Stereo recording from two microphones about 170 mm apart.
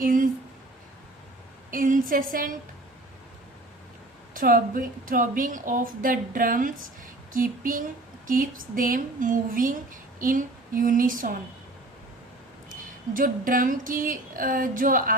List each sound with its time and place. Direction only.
0.0 s speech: 55° right (ahead or behind)
1.7 s a woman's voice: 55° right (ahead or behind)
4.4 s a woman's voice: 55° right (ahead or behind)
13.1 s a woman's voice: 55° right (ahead or behind)